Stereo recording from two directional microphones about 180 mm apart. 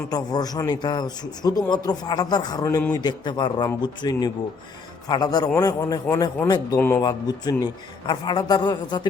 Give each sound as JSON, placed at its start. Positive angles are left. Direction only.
{"t": 0.1, "sound": "a man's voice", "side_deg": 20}